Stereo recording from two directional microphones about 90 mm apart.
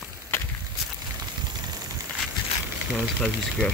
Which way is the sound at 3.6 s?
15° left (ahead or behind).